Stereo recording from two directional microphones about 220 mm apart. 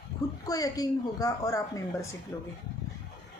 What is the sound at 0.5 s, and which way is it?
Speech, 15° left (ahead or behind).